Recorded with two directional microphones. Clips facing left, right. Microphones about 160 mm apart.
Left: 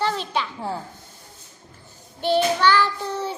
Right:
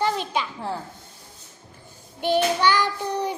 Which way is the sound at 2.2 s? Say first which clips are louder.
Left 1 dB; 15° right (ahead or behind).